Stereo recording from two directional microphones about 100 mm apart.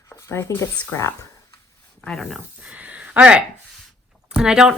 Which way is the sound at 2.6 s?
15° right (ahead or behind).